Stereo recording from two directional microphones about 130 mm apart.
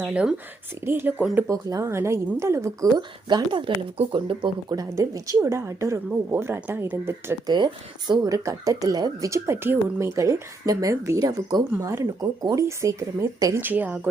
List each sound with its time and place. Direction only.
0.0 s speech: 10° right (ahead or behind)
3.2 s speech: 35° right (ahead or behind); by 7.3 s 20° right (ahead or behind)
7.4 s speech: 35° right (ahead or behind); by 14.1 s 10° right (ahead or behind)